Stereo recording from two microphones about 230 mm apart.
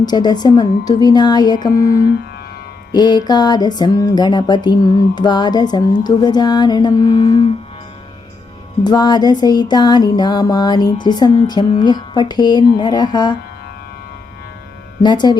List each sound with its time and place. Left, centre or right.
0.0 s music: centre
8.8 s music: centre
11.4 s speech: centre
15.0 s speech: centre